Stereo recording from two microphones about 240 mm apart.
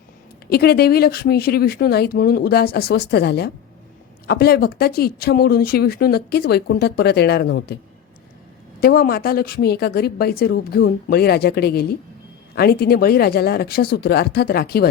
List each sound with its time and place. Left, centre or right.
0.5 s speech: left
8.8 s speech: left